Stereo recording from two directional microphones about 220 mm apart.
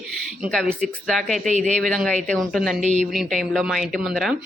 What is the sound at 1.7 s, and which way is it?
A man's voice, centre (ahead or behind).